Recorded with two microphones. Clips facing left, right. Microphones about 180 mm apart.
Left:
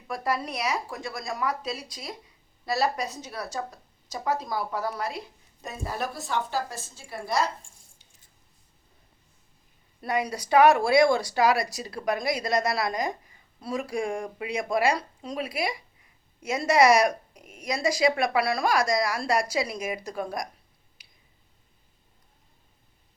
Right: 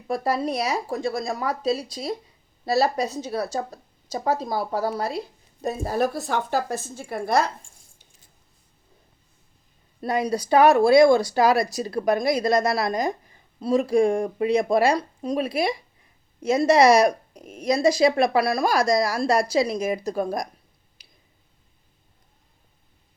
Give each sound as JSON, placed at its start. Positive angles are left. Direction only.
{"t": 0.1, "sound": "a woman's voice", "side_deg": -30}
{"t": 10.0, "sound": "a woman's voice", "side_deg": -30}
{"t": 16.4, "sound": "speech", "side_deg": -25}